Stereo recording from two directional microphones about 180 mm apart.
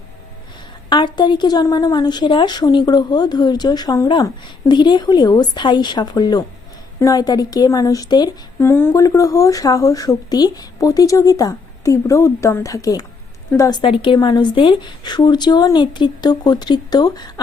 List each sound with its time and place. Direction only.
0.9 s speech: 25° left (ahead or behind)